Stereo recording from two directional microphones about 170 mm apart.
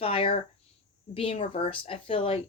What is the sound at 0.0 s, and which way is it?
Speech, 35° left (ahead or behind).